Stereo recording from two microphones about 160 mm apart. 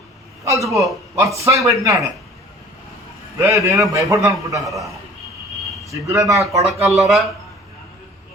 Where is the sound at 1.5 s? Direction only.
20° right (ahead or behind).